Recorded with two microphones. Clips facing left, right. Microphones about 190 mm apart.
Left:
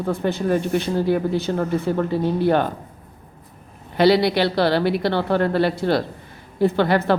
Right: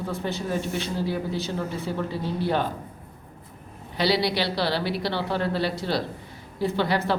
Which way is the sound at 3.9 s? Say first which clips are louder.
Left 8 dB; 55° left (ahead or behind).